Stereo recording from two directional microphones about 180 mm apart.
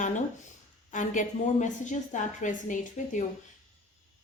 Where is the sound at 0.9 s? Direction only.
45° left (ahead or behind).